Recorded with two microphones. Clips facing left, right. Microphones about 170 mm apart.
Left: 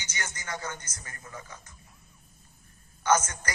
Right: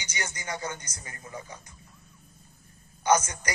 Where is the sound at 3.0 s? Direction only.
15° right (ahead or behind).